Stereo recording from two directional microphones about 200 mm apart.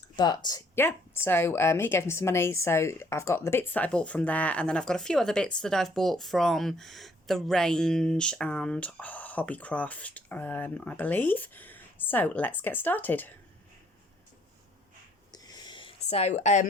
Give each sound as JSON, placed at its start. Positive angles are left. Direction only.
{"t": 0.2, "sound": "a woman's voice", "side_deg": 20}
{"t": 15.3, "sound": "a sound", "side_deg": 20}
{"t": 16.4, "sound": "speech", "side_deg": 35}